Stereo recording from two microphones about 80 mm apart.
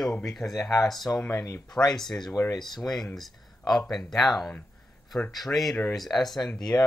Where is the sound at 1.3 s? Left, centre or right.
Left.